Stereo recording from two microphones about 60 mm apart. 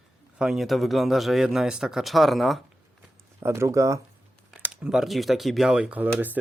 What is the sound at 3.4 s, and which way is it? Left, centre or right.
Speech, right.